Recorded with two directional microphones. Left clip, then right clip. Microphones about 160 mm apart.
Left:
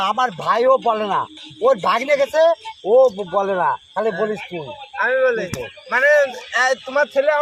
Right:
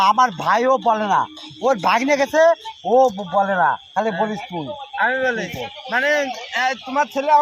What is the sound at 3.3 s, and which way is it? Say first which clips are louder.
Speech: right 1 dB; 40° left (ahead or behind).